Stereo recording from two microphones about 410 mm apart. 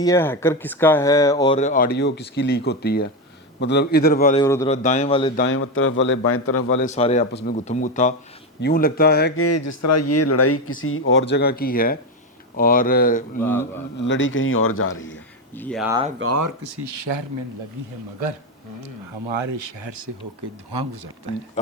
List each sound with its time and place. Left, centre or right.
0.0 s speech: centre
5.4 s speech: left
6.8 s speech: centre
13.4 s speech: centre
14.0 s speech: left
15.5 s speech: centre
16.2 s speech: right
16.6 s speech: right
19.3 s speech: right